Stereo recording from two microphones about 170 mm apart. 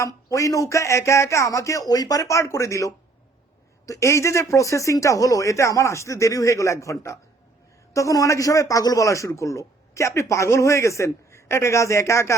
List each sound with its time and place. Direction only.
0.0 s speech: 20° left (ahead or behind)